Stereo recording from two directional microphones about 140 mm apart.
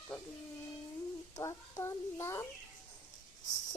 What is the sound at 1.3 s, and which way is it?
A child's voice, 20° left (ahead or behind).